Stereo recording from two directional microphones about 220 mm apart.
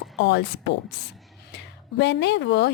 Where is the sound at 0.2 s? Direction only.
50° left (ahead or behind).